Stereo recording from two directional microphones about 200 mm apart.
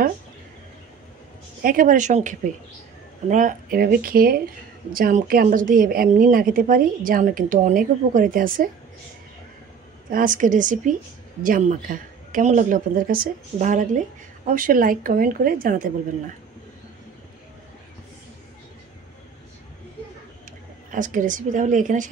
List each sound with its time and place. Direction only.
1.6 s a woman's voice: 45° right (ahead or behind)
10.0 s a woman's voice: 40° right (ahead or behind)
20.9 s a woman's voice: 40° right (ahead or behind)